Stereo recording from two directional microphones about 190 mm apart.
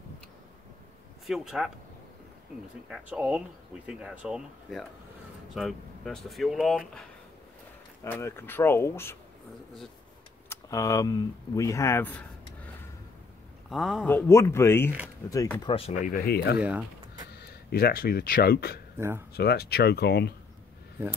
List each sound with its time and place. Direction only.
1.2 s speech: centre (ahead or behind)
2.9 s speech: 5° right (ahead or behind)
8.0 s speech: 15° left (ahead or behind)
10.5 s speech: 15° left (ahead or behind)
13.7 s speech: centre (ahead or behind)
14.0 s speech: 10° left (ahead or behind)
15.7 s speech: 30° left (ahead or behind)
16.0 s speech: 50° left (ahead or behind)
16.5 s speech: 5° right (ahead or behind)
17.3 s speech: 55° left (ahead or behind)
18.9 s speech: 10° right (ahead or behind)
19.3 s speech: 55° left (ahead or behind)